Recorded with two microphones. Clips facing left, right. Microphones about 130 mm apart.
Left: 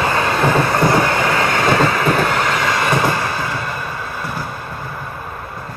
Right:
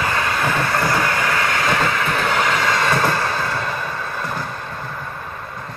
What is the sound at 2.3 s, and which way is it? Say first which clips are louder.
Train: left 1 dB; 5° left (ahead or behind).